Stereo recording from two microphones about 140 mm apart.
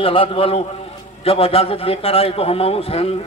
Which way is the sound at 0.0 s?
40° left (ahead or behind).